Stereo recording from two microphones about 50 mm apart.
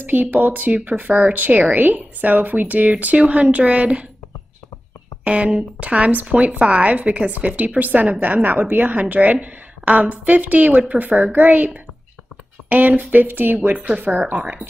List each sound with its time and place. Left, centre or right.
0.0 s speech: right
5.2 s speech: right
13.7 s speech: right